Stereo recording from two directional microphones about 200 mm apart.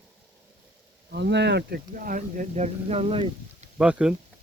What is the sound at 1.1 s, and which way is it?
Speech, 60° right (ahead or behind).